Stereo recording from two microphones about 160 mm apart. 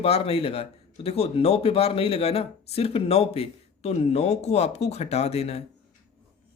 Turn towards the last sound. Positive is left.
turn(degrees=40)  # may be behind; listen again after turning